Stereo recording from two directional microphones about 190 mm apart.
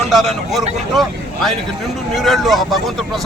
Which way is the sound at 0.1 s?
Centre (ahead or behind).